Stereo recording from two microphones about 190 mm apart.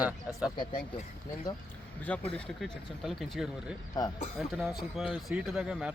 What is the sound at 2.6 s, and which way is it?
Speech, centre (ahead or behind).